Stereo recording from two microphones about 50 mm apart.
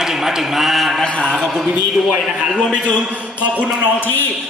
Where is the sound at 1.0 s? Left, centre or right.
Centre.